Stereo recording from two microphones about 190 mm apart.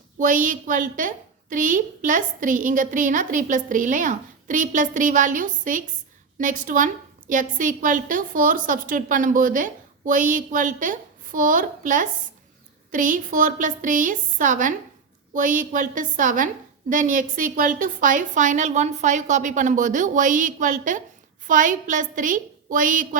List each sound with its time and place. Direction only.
0.2 s a woman's voice: 45° right (ahead or behind)